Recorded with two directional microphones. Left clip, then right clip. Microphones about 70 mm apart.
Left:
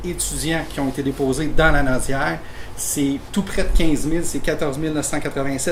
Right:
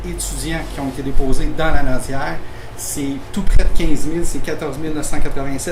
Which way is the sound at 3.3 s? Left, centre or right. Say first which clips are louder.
Left 2 dB; centre.